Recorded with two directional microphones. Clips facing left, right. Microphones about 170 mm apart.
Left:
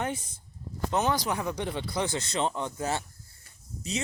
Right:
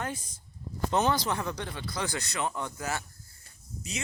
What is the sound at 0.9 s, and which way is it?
Speech, 5° left (ahead or behind).